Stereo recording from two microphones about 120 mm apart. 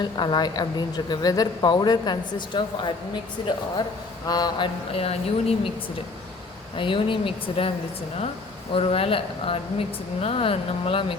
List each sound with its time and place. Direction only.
0.0 s a woman's voice: 35° left (ahead or behind)
4.3 s speech: 35° left (ahead or behind); by 5.7 s 55° left (ahead or behind)
6.7 s speech: 45° left (ahead or behind)
8.7 s speech: 50° left (ahead or behind)